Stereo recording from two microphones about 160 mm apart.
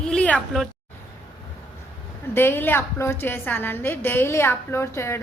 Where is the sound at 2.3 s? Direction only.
15° left (ahead or behind).